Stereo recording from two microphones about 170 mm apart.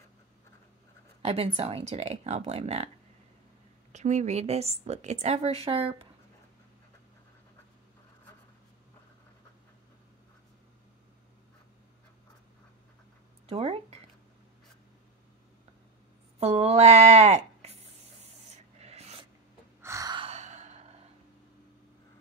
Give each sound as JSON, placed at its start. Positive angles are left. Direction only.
{"t": 1.2, "sound": "a woman's voice", "side_deg": -35}
{"t": 3.9, "sound": "a woman's voice", "side_deg": -45}
{"t": 13.5, "sound": "a sound", "side_deg": -35}
{"t": 16.3, "sound": "a sound", "side_deg": -40}
{"t": 19.8, "sound": "gasp", "side_deg": -20}
{"t": 20.2, "sound": "sigh", "side_deg": -40}